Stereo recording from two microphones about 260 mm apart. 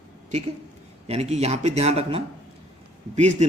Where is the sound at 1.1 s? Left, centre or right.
Right.